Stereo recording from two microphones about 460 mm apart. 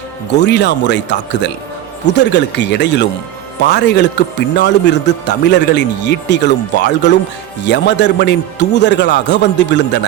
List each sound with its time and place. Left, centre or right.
0.3 s a man's voice: left